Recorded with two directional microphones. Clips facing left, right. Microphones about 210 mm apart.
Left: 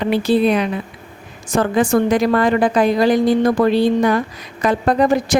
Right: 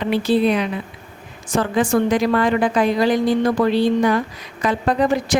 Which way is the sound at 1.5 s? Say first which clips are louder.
Left 3 dB; 45° left (ahead or behind).